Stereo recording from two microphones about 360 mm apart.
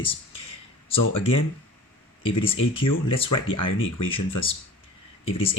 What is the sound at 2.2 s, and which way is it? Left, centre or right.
Speech, centre.